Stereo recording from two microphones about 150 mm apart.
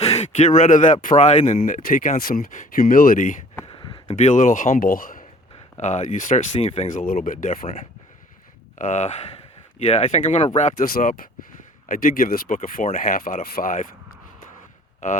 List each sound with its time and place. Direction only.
0.0 s speech: 45° left (ahead or behind)
1.6 s speech: 65° left (ahead or behind)
3.7 s a sound: 30° left (ahead or behind)
4.1 s speech: 50° left (ahead or behind); by 5.2 s 70° left (ahead or behind)
5.5 s speech: 50° left (ahead or behind)
6.9 s speech: 60° left (ahead or behind)